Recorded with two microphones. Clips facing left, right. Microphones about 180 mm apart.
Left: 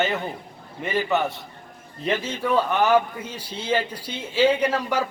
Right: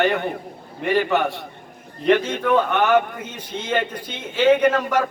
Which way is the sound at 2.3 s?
60° right (ahead or behind).